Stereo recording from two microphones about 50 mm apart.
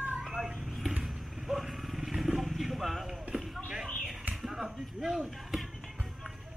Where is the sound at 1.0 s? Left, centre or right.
Centre.